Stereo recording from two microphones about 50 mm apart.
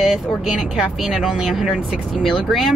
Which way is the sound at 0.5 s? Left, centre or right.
Centre.